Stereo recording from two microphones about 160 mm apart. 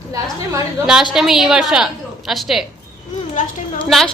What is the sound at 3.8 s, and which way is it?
Speech, centre (ahead or behind).